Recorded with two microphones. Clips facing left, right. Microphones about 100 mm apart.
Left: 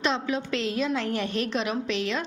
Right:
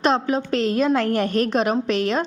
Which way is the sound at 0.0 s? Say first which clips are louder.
Right 7 dB; 40° right (ahead or behind).